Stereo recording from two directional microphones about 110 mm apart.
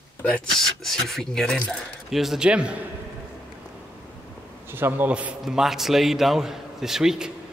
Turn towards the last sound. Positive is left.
turn(degrees=-5)  # may be behind; listen again after turning